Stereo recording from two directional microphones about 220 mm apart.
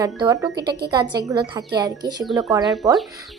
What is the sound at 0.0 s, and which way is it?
A woman's voice, 15° right (ahead or behind).